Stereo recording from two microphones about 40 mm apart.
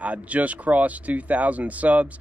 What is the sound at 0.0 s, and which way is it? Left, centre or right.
Speech, right.